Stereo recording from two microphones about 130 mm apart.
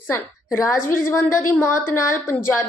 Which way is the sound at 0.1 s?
20° left (ahead or behind).